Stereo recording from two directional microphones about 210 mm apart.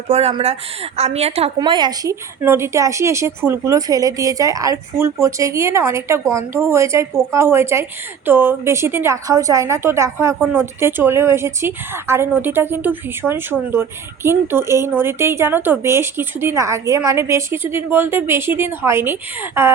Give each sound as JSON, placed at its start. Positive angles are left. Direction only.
{"t": 0.1, "sound": "speech", "side_deg": -30}
{"t": 2.4, "sound": "a woman's voice", "side_deg": -10}